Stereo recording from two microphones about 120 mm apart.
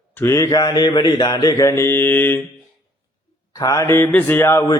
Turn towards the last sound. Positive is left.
turn(degrees=20)  # may be behind; listen again after turning